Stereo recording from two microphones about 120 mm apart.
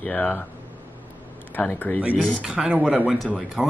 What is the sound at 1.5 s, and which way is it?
Speech, 15° left (ahead or behind).